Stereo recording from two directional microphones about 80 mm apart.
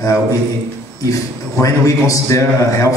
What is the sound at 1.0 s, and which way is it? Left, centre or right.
A man's voice, left.